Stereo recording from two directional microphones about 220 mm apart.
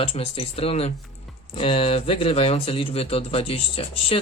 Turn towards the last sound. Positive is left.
turn(degrees=25)  # may be behind; listen again after turning